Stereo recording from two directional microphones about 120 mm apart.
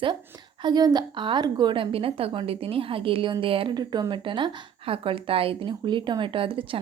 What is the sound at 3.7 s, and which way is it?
A woman's voice, 35° right (ahead or behind).